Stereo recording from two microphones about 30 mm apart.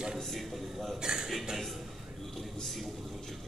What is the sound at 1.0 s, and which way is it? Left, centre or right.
Speech, right.